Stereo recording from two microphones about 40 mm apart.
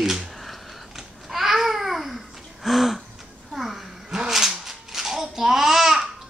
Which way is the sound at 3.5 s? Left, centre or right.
Centre.